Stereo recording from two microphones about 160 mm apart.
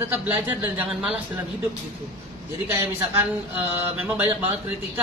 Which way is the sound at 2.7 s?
15° right (ahead or behind).